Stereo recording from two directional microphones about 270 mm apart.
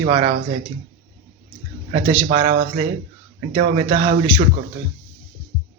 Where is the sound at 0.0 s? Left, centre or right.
Right.